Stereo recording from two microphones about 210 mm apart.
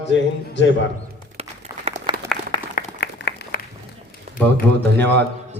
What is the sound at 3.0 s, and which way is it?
Applause, 50° left (ahead or behind).